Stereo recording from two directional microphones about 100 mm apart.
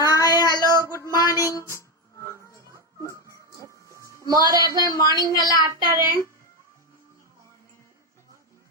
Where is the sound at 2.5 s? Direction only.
30° left (ahead or behind).